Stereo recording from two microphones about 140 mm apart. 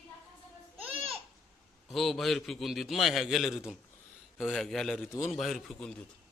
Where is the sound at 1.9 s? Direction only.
Centre (ahead or behind).